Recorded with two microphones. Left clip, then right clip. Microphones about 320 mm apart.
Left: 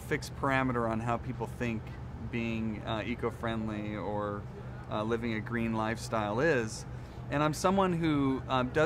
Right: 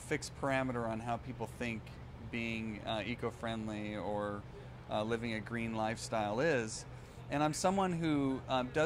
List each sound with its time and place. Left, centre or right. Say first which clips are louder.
0.1 s speech: left 5 dB; right